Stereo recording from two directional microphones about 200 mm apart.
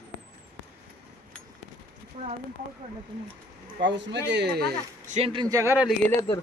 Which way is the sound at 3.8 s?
60° right (ahead or behind).